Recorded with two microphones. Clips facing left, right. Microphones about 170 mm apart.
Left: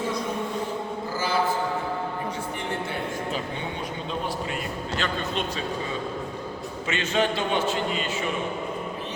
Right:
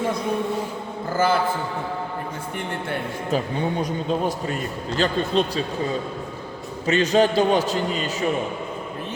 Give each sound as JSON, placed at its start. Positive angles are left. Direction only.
{"t": 1.1, "sound": "a sound", "side_deg": -55}
{"t": 4.9, "sound": "a man's voice", "side_deg": -35}
{"t": 6.8, "sound": "a man's voice", "side_deg": -40}